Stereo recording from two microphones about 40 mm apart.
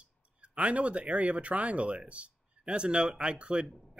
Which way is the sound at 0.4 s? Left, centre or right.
Right.